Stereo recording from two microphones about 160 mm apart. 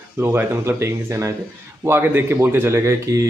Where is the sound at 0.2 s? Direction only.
15° right (ahead or behind).